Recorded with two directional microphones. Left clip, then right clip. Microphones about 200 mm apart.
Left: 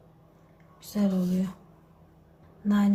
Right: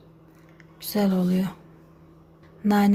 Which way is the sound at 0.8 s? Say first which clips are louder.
Right 5 dB; 50° right (ahead or behind).